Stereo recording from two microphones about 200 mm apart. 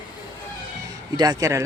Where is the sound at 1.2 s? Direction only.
20° right (ahead or behind).